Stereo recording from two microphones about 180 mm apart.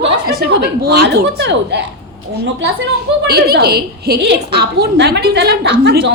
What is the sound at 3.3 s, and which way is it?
A woman's voice, 60° right (ahead or behind).